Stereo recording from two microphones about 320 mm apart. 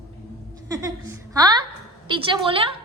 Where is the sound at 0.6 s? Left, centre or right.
Centre.